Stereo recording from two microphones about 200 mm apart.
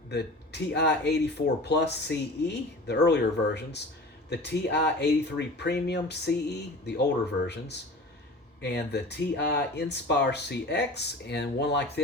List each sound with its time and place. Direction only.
0.7 s speech: 55° left (ahead or behind)